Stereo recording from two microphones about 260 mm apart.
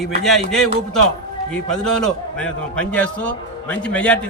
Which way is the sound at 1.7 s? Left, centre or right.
Centre.